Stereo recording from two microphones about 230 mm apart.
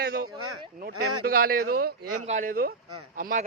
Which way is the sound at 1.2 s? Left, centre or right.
Right.